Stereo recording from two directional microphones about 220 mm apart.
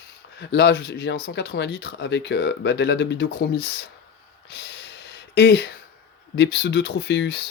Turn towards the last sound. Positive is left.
turn(degrees=50)  # may be behind; listen again after turning